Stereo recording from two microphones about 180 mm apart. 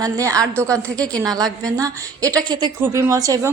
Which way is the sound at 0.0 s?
20° right (ahead or behind).